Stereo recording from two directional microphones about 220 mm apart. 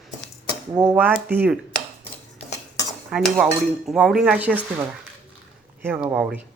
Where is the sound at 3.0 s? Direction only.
5° right (ahead or behind).